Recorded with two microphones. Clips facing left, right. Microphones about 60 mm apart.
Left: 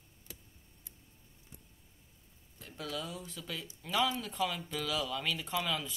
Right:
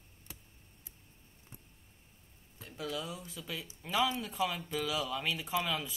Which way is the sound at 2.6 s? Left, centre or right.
Centre.